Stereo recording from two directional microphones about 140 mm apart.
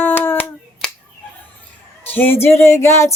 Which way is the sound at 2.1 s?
15° left (ahead or behind).